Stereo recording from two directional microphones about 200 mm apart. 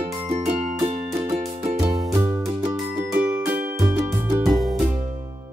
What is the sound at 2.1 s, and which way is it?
Music, 15° right (ahead or behind).